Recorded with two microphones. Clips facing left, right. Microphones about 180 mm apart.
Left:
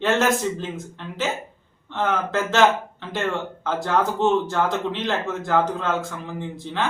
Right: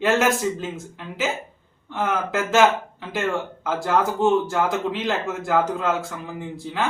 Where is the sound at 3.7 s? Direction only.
5° right (ahead or behind).